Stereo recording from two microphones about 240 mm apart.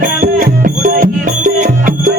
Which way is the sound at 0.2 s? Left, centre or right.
Right.